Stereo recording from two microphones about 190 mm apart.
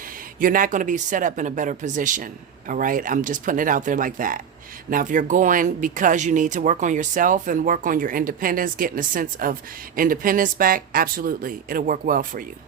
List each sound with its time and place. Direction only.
0.3 s speech: 45° right (ahead or behind)